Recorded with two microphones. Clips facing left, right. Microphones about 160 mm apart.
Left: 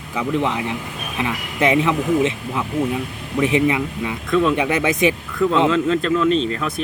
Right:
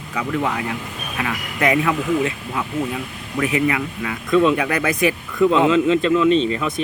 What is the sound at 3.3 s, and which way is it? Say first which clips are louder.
Speech: left 2 dB; 25° left (ahead or behind).